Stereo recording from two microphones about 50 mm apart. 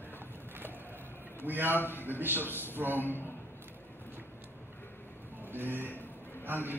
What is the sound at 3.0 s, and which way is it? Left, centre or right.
Speech, left.